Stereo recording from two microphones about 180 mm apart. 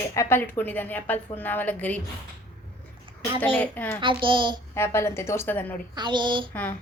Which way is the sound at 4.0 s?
25° right (ahead or behind).